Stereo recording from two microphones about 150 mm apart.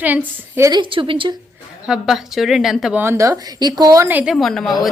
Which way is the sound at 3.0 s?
20° right (ahead or behind).